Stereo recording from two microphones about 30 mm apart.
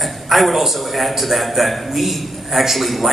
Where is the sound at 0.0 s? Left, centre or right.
Centre.